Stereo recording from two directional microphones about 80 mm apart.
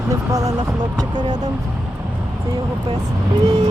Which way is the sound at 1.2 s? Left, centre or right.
Right.